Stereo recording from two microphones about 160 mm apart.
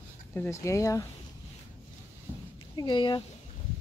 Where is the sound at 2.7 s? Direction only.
30° left (ahead or behind).